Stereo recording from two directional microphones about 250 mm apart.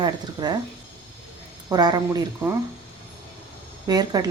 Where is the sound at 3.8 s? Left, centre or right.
Centre.